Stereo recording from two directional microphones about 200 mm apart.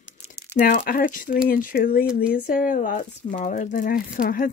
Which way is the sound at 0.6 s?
40° left (ahead or behind).